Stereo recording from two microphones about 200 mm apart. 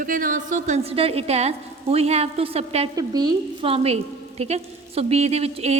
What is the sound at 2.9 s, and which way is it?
A woman's voice, 20° right (ahead or behind).